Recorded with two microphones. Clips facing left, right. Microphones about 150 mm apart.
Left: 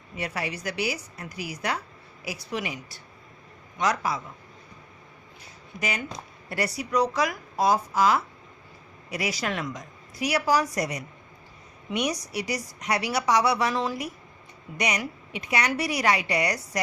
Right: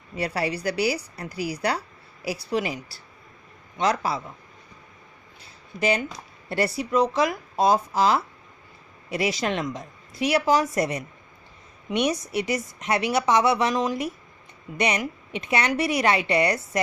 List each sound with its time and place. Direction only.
0.2 s a woman's voice: 35° right (ahead or behind)
6.5 s a woman's voice: 25° right (ahead or behind)